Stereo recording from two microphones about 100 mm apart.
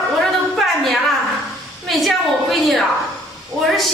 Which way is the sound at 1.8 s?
Centre (ahead or behind).